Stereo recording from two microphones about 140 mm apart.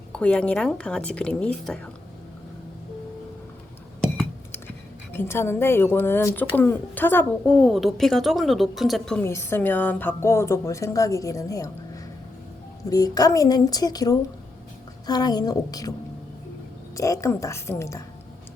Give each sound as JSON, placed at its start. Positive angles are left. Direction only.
{"t": 0.1, "sound": "speech", "side_deg": 5}
{"t": 5.1, "sound": "speech", "side_deg": 15}
{"t": 9.2, "sound": "a woman's voice", "side_deg": 20}
{"t": 12.9, "sound": "a woman's voice", "side_deg": 25}
{"t": 17.0, "sound": "a woman's voice", "side_deg": 20}